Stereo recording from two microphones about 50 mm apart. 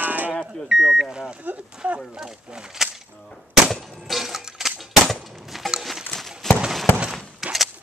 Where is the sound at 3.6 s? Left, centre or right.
Centre.